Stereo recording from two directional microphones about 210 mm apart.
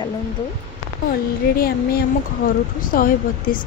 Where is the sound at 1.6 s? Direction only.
45° left (ahead or behind).